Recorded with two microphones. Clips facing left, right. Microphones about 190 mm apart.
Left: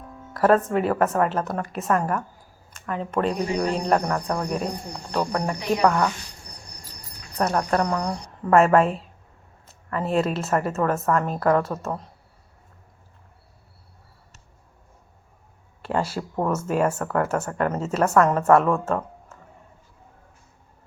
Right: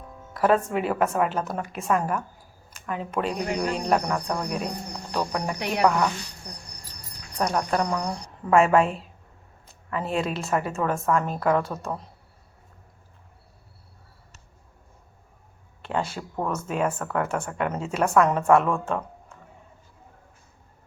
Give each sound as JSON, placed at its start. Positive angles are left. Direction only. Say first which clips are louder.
{"t": 0.3, "sound": "a woman's voice", "louder": "left 3 dB", "side_deg": 0}
{"t": 2.8, "sound": "a sound", "louder": "left 2 dB", "side_deg": 0}
{"t": 3.1, "sound": "a woman's voice", "louder": "left 3 dB", "side_deg": 0}
{"t": 6.4, "sound": "cricket", "louder": "right 4 dB", "side_deg": -90}
{"t": 7.5, "sound": "a woman's voice", "louder": "left 2 dB", "side_deg": 0}
{"t": 15.8, "sound": "speech", "louder": "left 3 dB", "side_deg": 5}
{"t": 17.0, "sound": "a woman's voice", "louder": "left 3 dB", "side_deg": 0}